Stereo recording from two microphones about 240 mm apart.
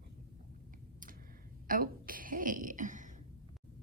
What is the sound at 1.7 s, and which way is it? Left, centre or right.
A woman's voice, right.